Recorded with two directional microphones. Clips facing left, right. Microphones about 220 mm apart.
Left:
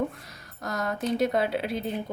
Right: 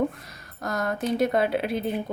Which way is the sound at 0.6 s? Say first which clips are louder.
Right 2 dB; 50° right (ahead or behind).